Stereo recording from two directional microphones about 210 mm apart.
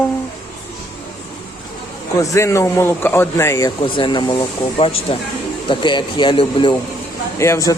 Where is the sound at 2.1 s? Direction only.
15° left (ahead or behind).